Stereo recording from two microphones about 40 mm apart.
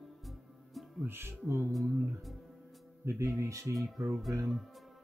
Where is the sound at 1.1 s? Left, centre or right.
Right.